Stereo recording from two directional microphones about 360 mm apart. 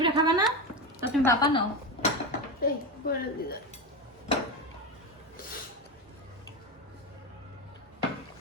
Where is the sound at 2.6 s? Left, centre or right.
Left.